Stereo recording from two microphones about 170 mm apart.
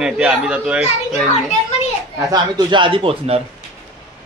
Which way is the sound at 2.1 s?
25° right (ahead or behind).